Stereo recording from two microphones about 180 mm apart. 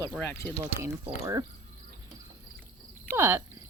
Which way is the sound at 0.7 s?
15° right (ahead or behind).